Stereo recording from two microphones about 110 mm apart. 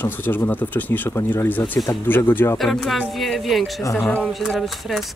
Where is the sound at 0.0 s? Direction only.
20° left (ahead or behind).